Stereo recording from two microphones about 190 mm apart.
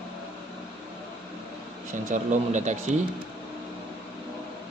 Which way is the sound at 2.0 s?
40° right (ahead or behind).